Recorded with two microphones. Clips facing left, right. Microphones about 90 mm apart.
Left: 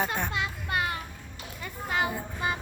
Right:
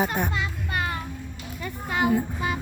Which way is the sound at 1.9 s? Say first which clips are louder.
Right 6 dB; 15° right (ahead or behind).